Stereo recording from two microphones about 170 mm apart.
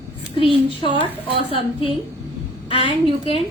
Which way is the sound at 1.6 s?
30° left (ahead or behind).